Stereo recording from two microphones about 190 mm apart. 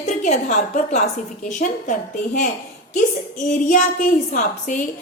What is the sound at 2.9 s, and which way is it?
A woman's voice, 40° left (ahead or behind).